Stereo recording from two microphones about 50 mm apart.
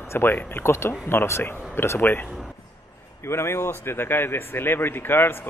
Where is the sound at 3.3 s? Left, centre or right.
Left.